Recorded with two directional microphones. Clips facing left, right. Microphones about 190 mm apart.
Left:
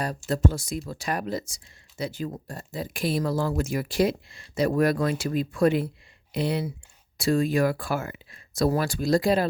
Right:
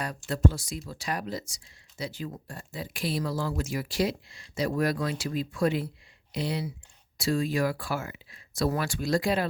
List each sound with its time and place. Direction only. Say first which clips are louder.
0.3 s speech: left 1 dB; 50° left (ahead or behind)